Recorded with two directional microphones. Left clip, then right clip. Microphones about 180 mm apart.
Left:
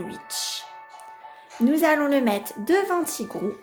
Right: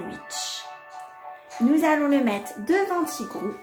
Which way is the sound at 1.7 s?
45° left (ahead or behind).